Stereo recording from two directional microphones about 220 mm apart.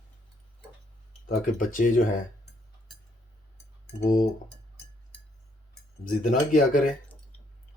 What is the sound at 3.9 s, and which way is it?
Speech, 40° left (ahead or behind).